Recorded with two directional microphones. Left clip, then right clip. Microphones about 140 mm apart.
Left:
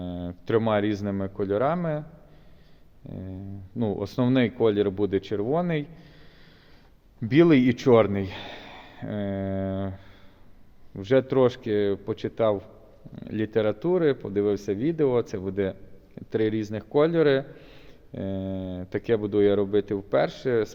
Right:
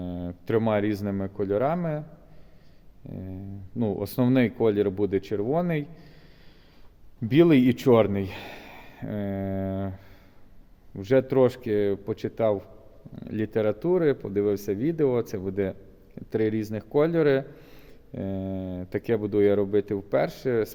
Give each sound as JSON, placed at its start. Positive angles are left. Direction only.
{"t": 0.0, "sound": "speech", "side_deg": -25}
{"t": 3.1, "sound": "a man's voice", "side_deg": -25}
{"t": 7.2, "sound": "a man's voice", "side_deg": -25}